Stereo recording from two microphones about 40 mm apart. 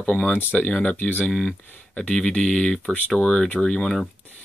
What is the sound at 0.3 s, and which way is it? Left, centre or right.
Speech, left.